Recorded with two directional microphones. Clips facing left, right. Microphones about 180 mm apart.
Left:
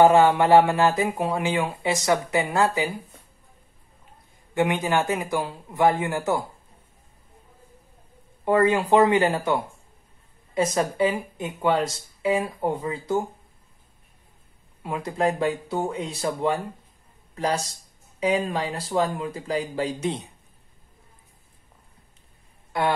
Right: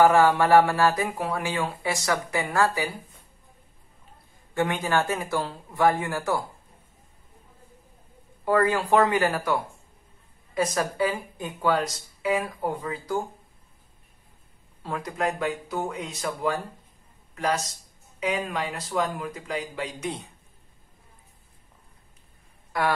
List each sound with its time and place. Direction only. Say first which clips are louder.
0.0 s speech: left 2 dB; 20° left (ahead or behind)
4.6 s speech: left 2 dB; 20° left (ahead or behind)
8.5 s speech: left 3 dB; 20° left (ahead or behind)
14.8 s speech: left 2 dB; 15° left (ahead or behind)
15.0 s speech: left 5 dB; 30° left (ahead or behind)
18.2 s speech: left 4 dB; 30° left (ahead or behind)
22.7 s speech: left 2 dB; 25° left (ahead or behind)